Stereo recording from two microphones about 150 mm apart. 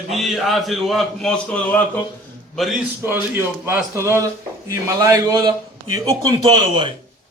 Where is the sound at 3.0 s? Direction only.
15° right (ahead or behind); by 6.9 s 30° right (ahead or behind).